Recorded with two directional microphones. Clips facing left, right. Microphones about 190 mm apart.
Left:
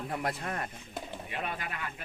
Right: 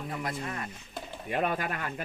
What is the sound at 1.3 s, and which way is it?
Speech, 45° right (ahead or behind).